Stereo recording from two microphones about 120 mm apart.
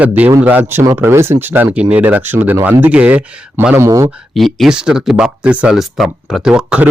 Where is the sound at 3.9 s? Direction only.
30° right (ahead or behind).